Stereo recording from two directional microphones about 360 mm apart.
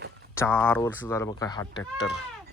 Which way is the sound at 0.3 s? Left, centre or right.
Centre.